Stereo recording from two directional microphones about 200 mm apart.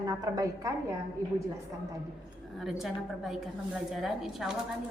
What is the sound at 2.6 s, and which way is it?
A woman's voice, centre (ahead or behind).